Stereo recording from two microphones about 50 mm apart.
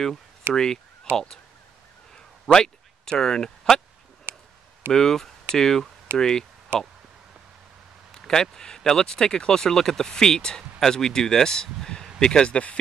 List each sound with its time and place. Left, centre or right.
0.5 s speech: right
1.1 s speech: centre
2.4 s speech: centre
4.3 s a sound: right
4.9 s speech: centre
6.7 s speech: right
8.1 s speech: centre